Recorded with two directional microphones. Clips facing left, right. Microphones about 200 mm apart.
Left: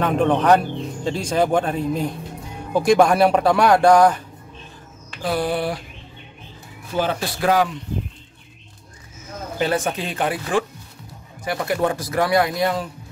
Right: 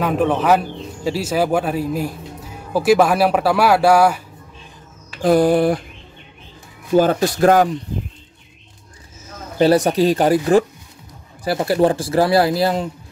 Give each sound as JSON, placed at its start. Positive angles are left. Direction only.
{"t": 0.0, "sound": "speech", "side_deg": -5}
{"t": 5.2, "sound": "speech", "side_deg": -45}
{"t": 7.0, "sound": "speech", "side_deg": -45}
{"t": 9.6, "sound": "a man's voice", "side_deg": -35}